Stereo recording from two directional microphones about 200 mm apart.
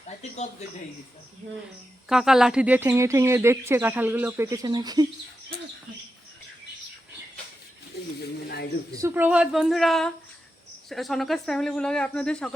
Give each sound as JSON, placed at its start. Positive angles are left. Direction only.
{"t": 2.0, "sound": "speech", "side_deg": 0}
{"t": 8.2, "sound": "speech", "side_deg": 55}
{"t": 9.0, "sound": "speech", "side_deg": -10}